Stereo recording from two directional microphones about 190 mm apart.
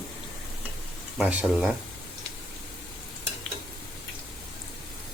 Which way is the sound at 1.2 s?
5° right (ahead or behind).